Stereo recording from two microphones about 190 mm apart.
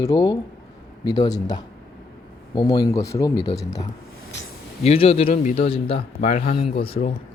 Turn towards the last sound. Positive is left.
turn(degrees=30)  # may be behind; listen again after turning